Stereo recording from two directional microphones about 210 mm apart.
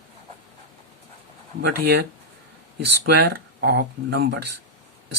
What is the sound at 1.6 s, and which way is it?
Speech, 50° right (ahead or behind).